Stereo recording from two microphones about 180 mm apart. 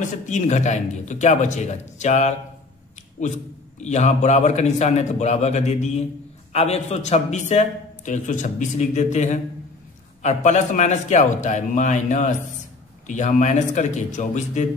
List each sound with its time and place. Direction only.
0.0 s a man's voice: 40° left (ahead or behind)
3.8 s a man's voice: 40° left (ahead or behind)